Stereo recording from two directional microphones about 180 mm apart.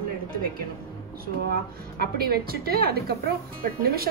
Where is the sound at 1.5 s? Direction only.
60° right (ahead or behind).